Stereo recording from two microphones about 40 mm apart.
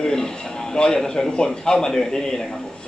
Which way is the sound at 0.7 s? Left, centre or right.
Centre.